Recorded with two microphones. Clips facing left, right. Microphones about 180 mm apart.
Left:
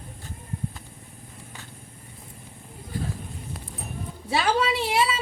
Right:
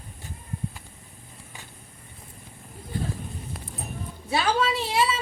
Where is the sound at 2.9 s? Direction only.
25° right (ahead or behind).